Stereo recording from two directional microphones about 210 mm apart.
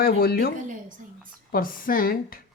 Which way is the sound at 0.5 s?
40° right (ahead or behind).